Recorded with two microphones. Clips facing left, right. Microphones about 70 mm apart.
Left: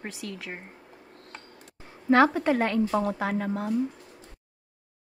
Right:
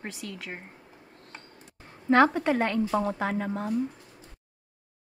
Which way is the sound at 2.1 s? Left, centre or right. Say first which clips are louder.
Left 1 dB; centre.